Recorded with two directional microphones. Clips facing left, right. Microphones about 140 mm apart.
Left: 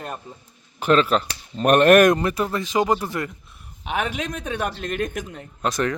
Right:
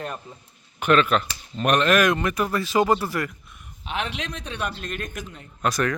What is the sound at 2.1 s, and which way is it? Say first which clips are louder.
Speech: left 1 dB; 30° left (ahead or behind).